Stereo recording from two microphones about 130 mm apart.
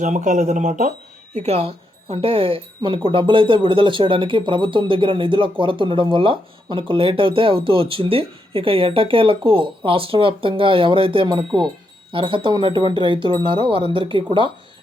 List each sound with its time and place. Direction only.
0.0 s speech: 75° right (ahead or behind)
1.4 s speech: 50° right (ahead or behind)